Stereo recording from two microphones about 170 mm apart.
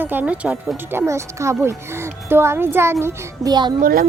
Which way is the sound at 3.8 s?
60° right (ahead or behind).